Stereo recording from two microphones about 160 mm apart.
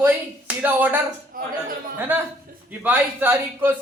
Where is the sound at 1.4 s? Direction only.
60° right (ahead or behind).